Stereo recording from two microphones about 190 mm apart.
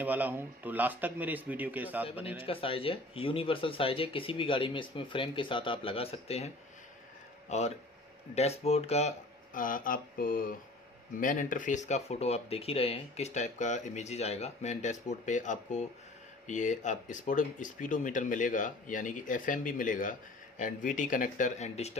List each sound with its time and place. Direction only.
0.0 s a man's voice: 10° right (ahead or behind)
2.3 s speech: 30° left (ahead or behind)